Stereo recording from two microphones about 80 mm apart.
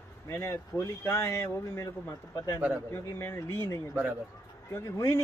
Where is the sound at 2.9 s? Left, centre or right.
Left.